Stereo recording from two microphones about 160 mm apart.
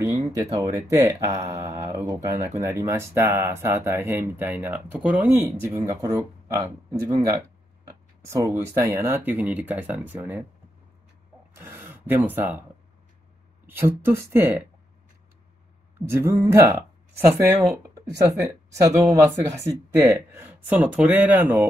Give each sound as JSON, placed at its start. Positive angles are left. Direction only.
{"t": 0.0, "sound": "speech", "side_deg": -25}
{"t": 5.9, "sound": "speech", "side_deg": -20}
{"t": 11.5, "sound": "speech", "side_deg": -15}
{"t": 13.7, "sound": "speech", "side_deg": -15}
{"t": 16.1, "sound": "speech", "side_deg": -20}